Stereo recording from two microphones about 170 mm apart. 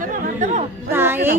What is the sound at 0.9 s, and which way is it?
Speech, 10° right (ahead or behind).